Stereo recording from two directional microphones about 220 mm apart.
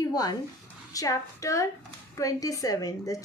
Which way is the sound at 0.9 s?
15° left (ahead or behind).